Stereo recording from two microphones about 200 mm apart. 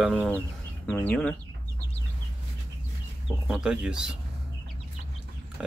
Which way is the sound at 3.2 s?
5° right (ahead or behind).